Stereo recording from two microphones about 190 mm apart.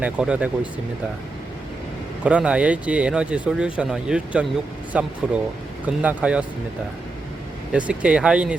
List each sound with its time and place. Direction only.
0.0 s speech: 5° right (ahead or behind)
2.2 s speech: 5° right (ahead or behind)
7.7 s speech: 5° right (ahead or behind)